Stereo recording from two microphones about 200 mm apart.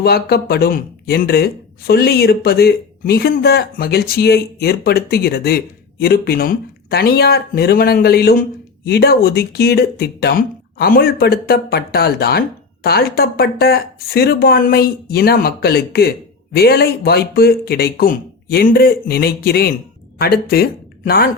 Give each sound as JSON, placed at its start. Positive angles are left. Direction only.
{"t": 0.0, "sound": "speech", "side_deg": 50}